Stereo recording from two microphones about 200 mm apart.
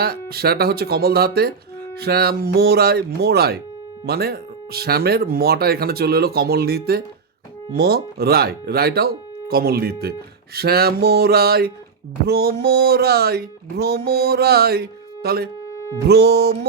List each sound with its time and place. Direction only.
0.0 s speech: 50° right (ahead or behind)